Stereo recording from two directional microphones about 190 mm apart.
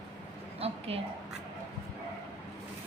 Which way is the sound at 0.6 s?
35° right (ahead or behind).